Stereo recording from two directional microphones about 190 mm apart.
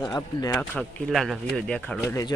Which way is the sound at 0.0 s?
20° left (ahead or behind).